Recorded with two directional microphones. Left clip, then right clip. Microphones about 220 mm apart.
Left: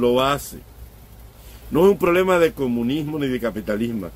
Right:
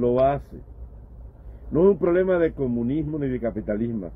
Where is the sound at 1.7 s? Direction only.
20° left (ahead or behind).